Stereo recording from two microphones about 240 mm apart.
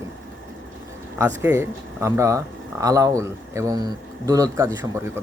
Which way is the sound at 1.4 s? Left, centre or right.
Centre.